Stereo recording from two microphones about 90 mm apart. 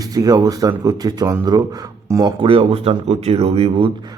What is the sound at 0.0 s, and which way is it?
Speech, 45° right (ahead or behind).